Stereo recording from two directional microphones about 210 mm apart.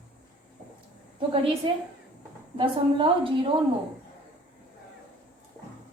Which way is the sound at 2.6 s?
25° right (ahead or behind).